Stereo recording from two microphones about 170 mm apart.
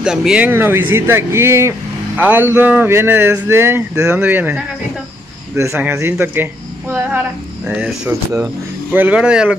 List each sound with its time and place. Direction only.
0.0 s speech: 5° right (ahead or behind)